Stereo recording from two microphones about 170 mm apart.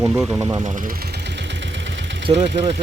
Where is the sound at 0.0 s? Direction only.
5° right (ahead or behind).